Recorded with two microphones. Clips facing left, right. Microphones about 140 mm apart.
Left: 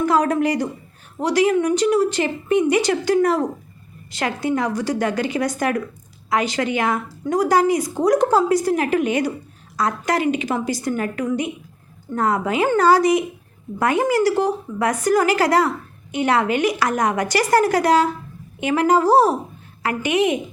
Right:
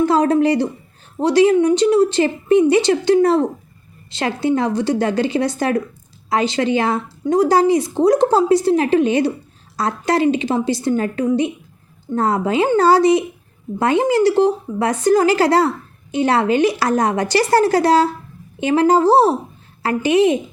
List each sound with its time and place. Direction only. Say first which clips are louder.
0.0 s a woman's voice: right 4 dB; 30° right (ahead or behind)